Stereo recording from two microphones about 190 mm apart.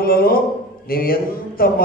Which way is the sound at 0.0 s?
50° left (ahead or behind).